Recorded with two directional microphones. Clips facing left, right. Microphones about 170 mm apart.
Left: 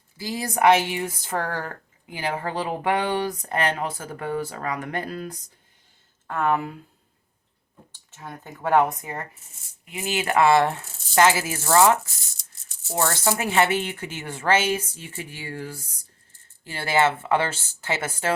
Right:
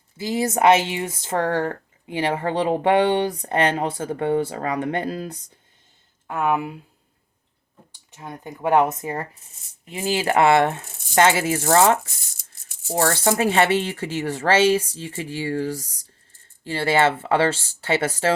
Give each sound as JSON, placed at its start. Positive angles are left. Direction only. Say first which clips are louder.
{"t": 0.2, "sound": "speech", "louder": "right 3 dB", "side_deg": -25}
{"t": 6.2, "sound": "speech", "louder": "right 1 dB", "side_deg": -10}
{"t": 8.1, "sound": "speech", "louder": "right 4 dB", "side_deg": -15}
{"t": 13.0, "sound": "speech", "louder": "right 4 dB", "side_deg": -30}